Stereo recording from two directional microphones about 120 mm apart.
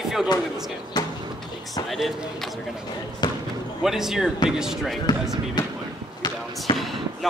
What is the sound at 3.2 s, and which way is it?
Basketball bounce, 35° left (ahead or behind).